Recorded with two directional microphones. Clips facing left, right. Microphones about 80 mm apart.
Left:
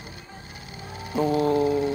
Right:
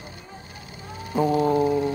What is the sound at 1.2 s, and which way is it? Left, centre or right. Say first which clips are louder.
Mantra: right 1 dB; right.